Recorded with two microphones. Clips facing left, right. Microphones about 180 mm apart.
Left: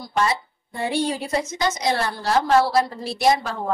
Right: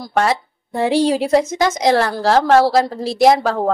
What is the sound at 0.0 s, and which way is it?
A woman's voice, 80° right.